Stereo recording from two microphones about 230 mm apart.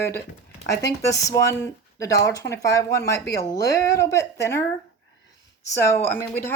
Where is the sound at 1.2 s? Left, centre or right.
Centre.